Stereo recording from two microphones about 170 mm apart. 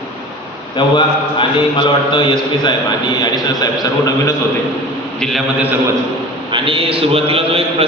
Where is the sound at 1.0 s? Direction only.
30° left (ahead or behind).